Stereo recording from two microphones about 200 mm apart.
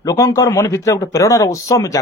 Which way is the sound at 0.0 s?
15° left (ahead or behind).